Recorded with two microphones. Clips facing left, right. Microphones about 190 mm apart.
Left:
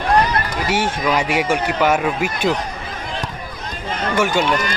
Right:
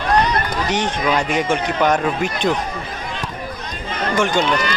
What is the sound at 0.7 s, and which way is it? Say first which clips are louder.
Speech: left 1 dB; 10° left (ahead or behind).